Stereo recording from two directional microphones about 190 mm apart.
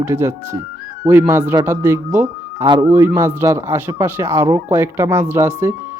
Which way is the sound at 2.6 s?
25° right (ahead or behind).